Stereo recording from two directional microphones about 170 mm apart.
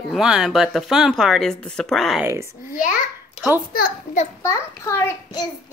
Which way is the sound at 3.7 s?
55° left (ahead or behind).